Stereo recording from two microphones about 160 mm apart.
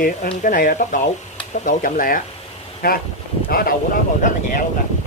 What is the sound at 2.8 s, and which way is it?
Speech, 80° left.